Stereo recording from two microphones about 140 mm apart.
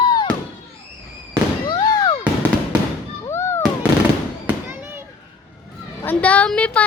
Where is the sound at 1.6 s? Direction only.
30° left (ahead or behind).